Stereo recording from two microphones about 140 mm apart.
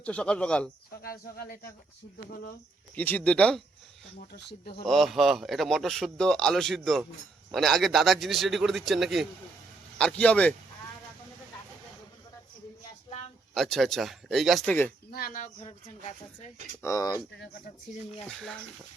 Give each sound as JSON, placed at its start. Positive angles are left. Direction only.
{"t": 0.0, "sound": "speech", "side_deg": 10}
{"t": 1.0, "sound": "speech", "side_deg": 90}
{"t": 2.9, "sound": "speech", "side_deg": 15}
{"t": 4.9, "sound": "speech", "side_deg": 0}
{"t": 13.5, "sound": "speech", "side_deg": 0}
{"t": 14.7, "sound": "speech", "side_deg": 10}
{"t": 15.1, "sound": "speech", "side_deg": 85}
{"t": 15.6, "sound": "a woman's voice", "side_deg": 55}
{"t": 16.8, "sound": "speech", "side_deg": 25}
{"t": 18.3, "sound": "speech", "side_deg": 5}